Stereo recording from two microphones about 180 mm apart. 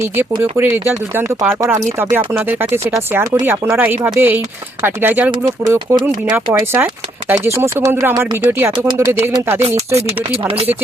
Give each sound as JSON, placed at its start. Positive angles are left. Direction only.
{"t": 0.0, "sound": "speech", "side_deg": -10}
{"t": 9.9, "sound": "speech", "side_deg": -30}